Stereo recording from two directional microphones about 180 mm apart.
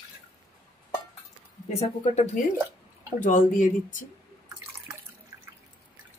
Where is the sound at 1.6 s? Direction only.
35° left (ahead or behind).